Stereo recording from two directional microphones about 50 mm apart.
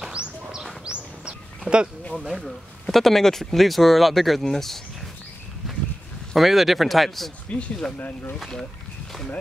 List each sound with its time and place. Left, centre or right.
0.1 s bird: centre
2.1 s speech: centre
2.4 s speech: centre
6.3 s speech: centre
7.4 s speech: left